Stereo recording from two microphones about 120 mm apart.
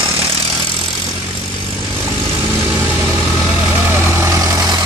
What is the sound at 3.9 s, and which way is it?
Vehicle, 20° right (ahead or behind).